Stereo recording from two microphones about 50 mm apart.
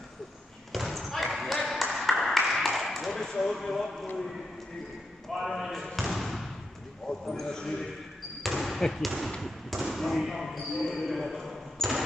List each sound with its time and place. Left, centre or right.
0.7 s basketball bounce: centre
5.3 s speech: centre
5.9 s basketball bounce: centre
7.1 s a man's voice: centre
8.4 s basketball bounce: centre
9.4 s speech: centre